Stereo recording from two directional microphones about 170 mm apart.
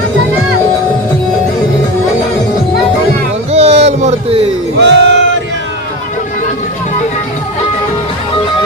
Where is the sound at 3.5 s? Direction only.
35° right (ahead or behind).